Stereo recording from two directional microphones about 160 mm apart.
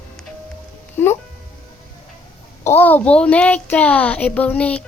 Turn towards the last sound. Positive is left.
turn(degrees=10)  # may be behind; listen again after turning